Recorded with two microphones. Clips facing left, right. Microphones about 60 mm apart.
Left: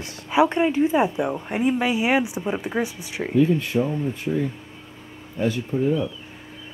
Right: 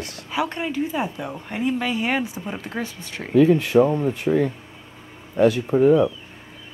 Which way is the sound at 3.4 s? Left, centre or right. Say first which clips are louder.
Right 5 dB; right.